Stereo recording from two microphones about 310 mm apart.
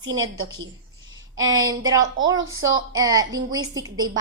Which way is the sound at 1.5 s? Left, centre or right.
Centre.